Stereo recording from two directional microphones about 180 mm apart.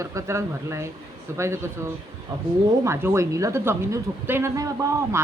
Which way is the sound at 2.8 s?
15° right (ahead or behind).